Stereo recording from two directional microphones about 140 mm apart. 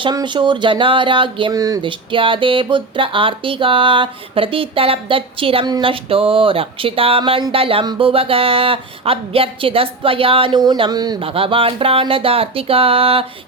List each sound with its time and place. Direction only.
0.0 s speech: 30° right (ahead or behind)
1.9 s speech: 40° right (ahead or behind)
11.2 s speech: 40° right (ahead or behind)